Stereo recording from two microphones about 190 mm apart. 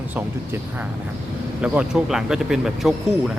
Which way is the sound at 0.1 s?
10° right (ahead or behind).